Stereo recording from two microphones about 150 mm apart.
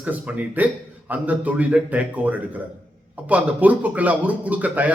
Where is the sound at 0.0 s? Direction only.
10° right (ahead or behind).